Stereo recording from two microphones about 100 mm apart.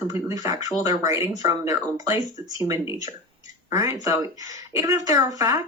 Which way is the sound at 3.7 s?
25° right (ahead or behind).